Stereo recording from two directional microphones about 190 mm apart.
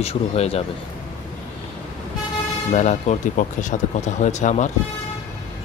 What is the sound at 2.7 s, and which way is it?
Speech, 35° left (ahead or behind).